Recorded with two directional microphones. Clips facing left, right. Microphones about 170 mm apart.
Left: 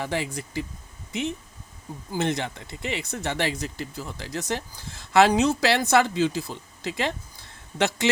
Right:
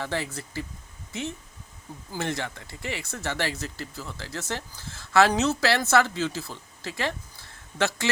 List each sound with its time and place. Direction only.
0.0 s speech: 15° left (ahead or behind)